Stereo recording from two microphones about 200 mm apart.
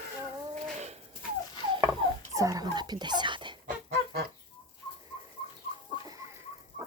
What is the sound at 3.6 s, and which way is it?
Goose, 50° right (ahead or behind).